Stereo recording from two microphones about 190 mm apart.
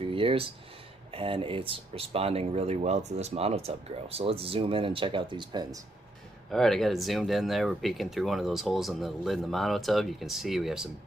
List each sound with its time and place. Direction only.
0.0 s a sound: 30° right (ahead or behind)
1.1 s speech: 30° right (ahead or behind)
6.5 s speech: centre (ahead or behind)